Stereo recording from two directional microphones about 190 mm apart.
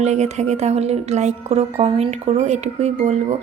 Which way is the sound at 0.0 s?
35° right (ahead or behind).